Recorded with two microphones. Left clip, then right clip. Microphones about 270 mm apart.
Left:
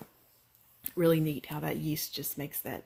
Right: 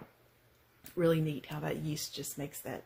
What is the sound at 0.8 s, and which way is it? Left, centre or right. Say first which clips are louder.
Speech: left 3 dB; left.